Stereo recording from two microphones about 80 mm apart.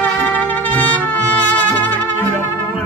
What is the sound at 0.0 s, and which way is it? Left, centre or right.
Music, left.